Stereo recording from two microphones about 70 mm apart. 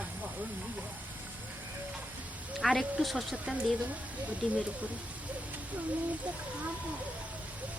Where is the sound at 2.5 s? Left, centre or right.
Centre.